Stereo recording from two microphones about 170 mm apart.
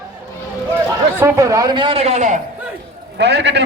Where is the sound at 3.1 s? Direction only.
85° right.